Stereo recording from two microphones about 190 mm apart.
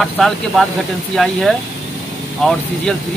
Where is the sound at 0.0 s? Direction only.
Centre (ahead or behind).